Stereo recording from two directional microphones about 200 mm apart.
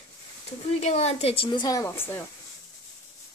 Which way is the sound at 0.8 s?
35° left (ahead or behind).